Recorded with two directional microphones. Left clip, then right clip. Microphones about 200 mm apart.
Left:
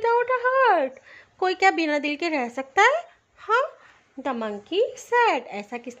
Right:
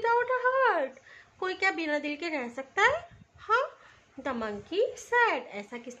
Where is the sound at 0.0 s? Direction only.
40° left (ahead or behind).